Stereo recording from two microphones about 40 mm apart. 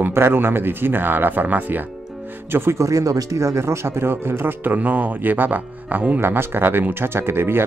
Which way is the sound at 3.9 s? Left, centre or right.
Right.